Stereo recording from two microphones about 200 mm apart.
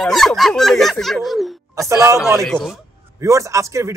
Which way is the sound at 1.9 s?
15° right (ahead or behind).